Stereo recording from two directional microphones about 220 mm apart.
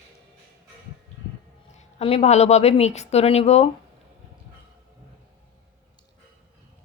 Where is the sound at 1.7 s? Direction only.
30° left (ahead or behind).